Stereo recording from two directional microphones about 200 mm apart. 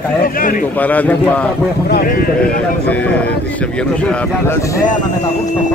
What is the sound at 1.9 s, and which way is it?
Speech, 45° left (ahead or behind).